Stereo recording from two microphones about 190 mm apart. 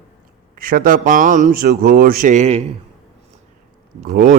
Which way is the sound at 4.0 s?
45° right (ahead or behind).